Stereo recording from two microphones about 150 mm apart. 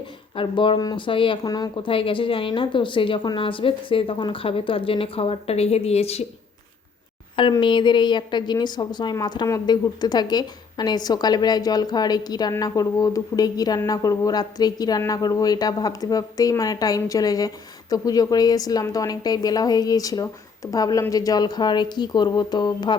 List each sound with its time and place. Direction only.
0.3 s speech: 35° left (ahead or behind)
7.6 s a woman's voice: 30° left (ahead or behind)